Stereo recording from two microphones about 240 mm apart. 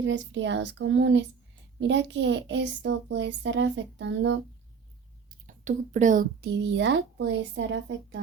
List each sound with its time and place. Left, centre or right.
0.0 s speech: right
5.3 s speech: right